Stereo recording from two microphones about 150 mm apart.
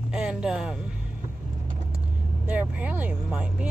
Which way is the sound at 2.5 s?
10° right (ahead or behind).